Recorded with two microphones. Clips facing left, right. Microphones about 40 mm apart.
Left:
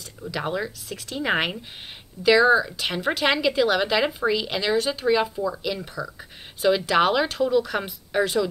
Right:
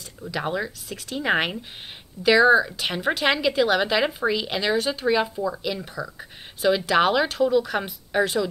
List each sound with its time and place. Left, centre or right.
0.2 s a woman's voice: centre